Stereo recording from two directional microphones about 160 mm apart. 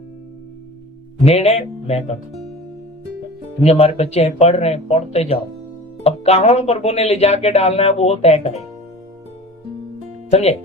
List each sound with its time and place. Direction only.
1.2 s speech: 40° left (ahead or behind)
3.6 s speech: 40° left (ahead or behind)